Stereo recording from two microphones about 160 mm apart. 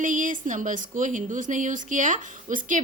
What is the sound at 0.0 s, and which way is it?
A woman's voice, 55° right (ahead or behind).